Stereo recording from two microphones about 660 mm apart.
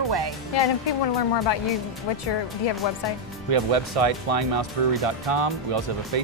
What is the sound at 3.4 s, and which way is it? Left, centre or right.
Speech, right.